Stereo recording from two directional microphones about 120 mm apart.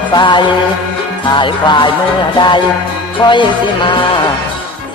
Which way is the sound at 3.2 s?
40° left (ahead or behind).